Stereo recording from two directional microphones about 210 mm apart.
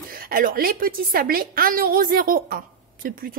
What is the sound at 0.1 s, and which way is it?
A woman's voice, 45° right (ahead or behind).